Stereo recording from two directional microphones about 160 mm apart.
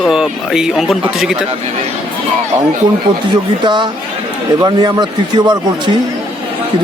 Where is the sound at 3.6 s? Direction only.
30° right (ahead or behind).